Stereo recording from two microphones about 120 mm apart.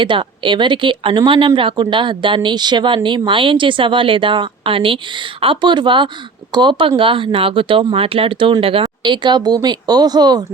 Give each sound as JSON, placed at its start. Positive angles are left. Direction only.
{"t": 0.0, "sound": "speech", "side_deg": -45}